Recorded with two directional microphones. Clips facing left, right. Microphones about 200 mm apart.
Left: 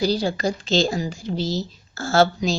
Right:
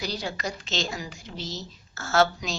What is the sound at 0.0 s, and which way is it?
A woman's voice, 30° left (ahead or behind).